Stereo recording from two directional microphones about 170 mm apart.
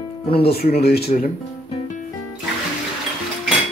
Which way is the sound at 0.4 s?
65° left (ahead or behind).